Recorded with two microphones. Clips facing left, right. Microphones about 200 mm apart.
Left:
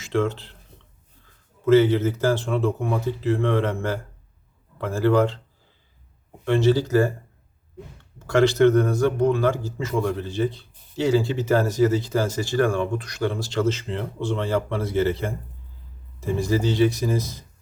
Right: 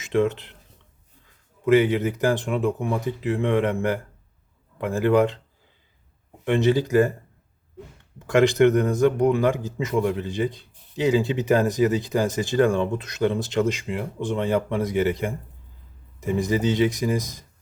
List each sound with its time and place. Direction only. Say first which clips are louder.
0.0 s speech: right 2 dB; 20° right (ahead or behind)
1.6 s speech: left 2 dB; 15° right (ahead or behind)
6.4 s speech: left 1 dB; 20° right (ahead or behind)
8.2 s speech: even; 15° right (ahead or behind)